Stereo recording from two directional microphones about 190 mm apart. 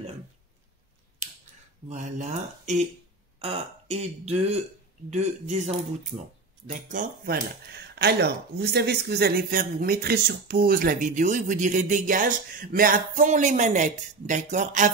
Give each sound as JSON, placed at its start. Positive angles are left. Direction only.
{"t": 1.2, "sound": "scissors", "side_deg": -40}
{"t": 1.9, "sound": "speech", "side_deg": -40}
{"t": 6.9, "sound": "speech", "side_deg": -45}
{"t": 7.7, "sound": "speech", "side_deg": -60}